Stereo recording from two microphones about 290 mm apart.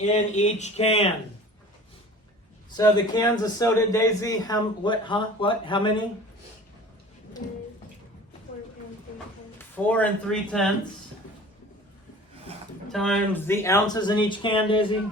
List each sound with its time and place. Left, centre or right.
0.1 s speech: left
2.7 s a man's voice: centre
9.6 s speech: centre
12.9 s a man's voice: centre